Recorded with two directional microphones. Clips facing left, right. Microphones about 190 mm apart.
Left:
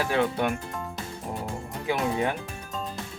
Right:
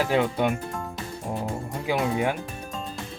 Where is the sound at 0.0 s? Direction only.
15° right (ahead or behind).